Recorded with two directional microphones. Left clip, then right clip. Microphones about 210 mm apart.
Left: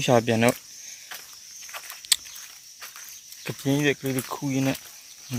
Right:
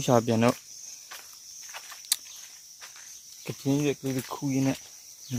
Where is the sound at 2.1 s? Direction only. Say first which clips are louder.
Left 7 dB; 15° right (ahead or behind).